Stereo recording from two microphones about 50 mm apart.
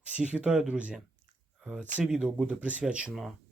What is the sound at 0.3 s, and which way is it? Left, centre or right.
Speech, right.